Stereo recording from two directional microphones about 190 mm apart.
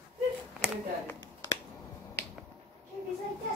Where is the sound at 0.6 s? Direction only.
5° right (ahead or behind).